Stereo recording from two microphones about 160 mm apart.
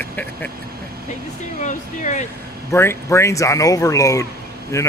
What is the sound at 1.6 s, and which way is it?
Speech, 50° left (ahead or behind).